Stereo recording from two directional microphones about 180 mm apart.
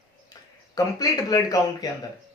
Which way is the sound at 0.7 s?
20° left (ahead or behind).